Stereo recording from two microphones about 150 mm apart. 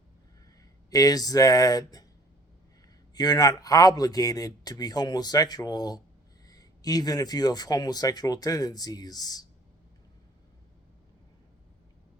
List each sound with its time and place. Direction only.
0.9 s speech: 25° left (ahead or behind)
3.2 s speech: 25° left (ahead or behind)